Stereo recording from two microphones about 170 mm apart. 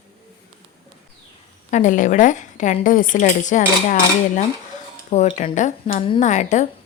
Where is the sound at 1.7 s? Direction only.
45° left (ahead or behind).